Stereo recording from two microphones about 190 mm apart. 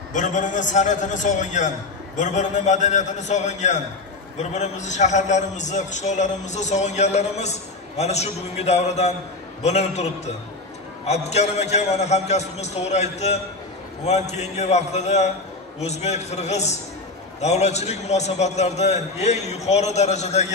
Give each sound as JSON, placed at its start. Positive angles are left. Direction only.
{"t": 0.1, "sound": "a man's voice", "side_deg": 40}